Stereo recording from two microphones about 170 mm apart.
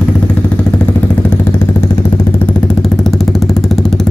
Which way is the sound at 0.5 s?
10° left (ahead or behind).